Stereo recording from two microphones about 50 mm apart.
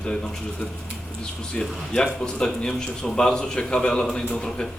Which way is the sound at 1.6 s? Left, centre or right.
Centre.